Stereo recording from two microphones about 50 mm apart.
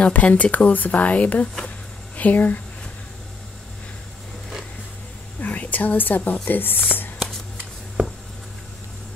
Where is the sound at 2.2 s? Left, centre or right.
Left.